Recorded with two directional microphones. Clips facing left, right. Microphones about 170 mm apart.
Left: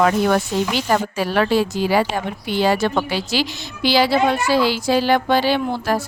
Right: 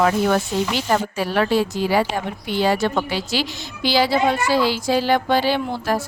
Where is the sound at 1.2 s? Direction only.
90° left.